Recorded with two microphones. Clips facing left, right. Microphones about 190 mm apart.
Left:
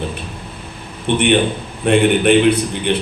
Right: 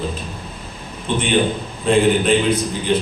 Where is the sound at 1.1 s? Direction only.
65° left (ahead or behind).